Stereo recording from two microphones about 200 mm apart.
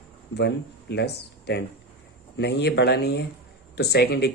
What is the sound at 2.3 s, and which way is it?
Speech, 55° left (ahead or behind).